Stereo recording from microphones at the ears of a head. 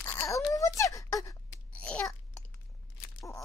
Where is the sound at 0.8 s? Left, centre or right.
Left.